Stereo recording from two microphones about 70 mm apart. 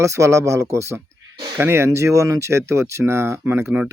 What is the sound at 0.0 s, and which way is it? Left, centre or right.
Speech, right.